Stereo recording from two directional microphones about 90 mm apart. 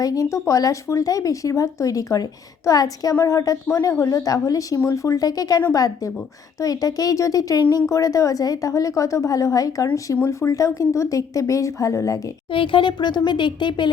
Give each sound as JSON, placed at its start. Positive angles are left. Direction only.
{"t": 0.0, "sound": "speech", "side_deg": 40}
{"t": 12.5, "sound": "speech", "side_deg": 75}